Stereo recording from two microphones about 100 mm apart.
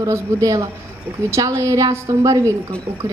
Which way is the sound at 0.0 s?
35° right (ahead or behind).